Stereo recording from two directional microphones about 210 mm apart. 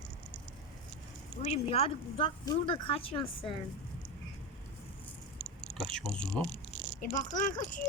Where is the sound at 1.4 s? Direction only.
30° left (ahead or behind).